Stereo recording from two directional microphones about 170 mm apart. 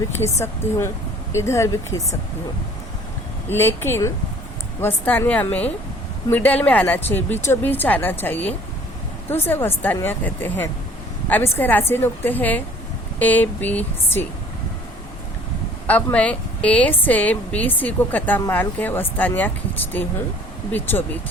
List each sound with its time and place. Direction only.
0.3 s a woman's voice: 15° left (ahead or behind)
3.5 s a woman's voice: 15° left (ahead or behind)
16.1 s a woman's voice: 5° left (ahead or behind)